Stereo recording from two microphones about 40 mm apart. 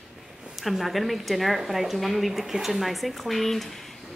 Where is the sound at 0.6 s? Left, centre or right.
Centre.